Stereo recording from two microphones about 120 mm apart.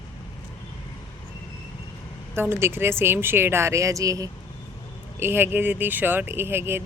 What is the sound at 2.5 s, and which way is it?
Speech, 20° right (ahead or behind).